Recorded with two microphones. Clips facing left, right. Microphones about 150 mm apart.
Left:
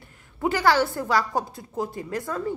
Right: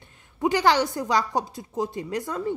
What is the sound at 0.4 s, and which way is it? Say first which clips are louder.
A woman's voice: even; 20° right (ahead or behind).